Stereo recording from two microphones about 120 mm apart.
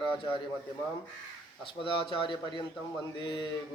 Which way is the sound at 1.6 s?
45° left (ahead or behind).